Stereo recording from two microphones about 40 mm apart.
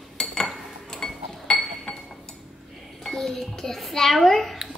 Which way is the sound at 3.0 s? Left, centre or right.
Centre.